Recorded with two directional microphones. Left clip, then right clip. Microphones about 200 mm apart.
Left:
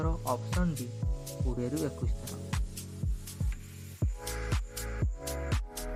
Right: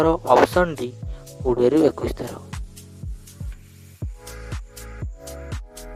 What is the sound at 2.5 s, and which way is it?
Music, centre (ahead or behind).